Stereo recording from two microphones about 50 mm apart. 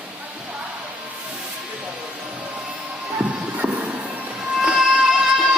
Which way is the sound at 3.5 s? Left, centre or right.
Right.